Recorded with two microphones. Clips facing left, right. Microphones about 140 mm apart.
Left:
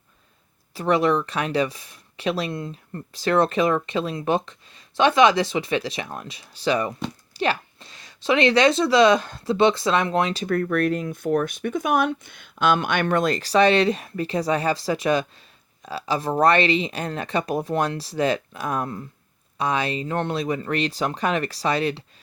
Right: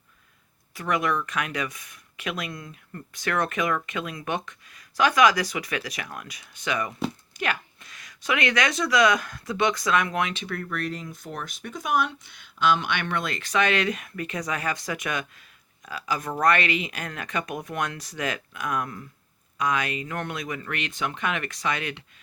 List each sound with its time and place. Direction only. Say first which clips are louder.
0.7 s speech: left 6 dB; 30° left (ahead or behind)
10.4 s speech: left 10 dB; 50° left (ahead or behind); by 22.0 s 35° left (ahead or behind)